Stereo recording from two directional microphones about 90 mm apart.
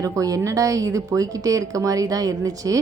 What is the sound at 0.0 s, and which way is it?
Speech, 35° right (ahead or behind).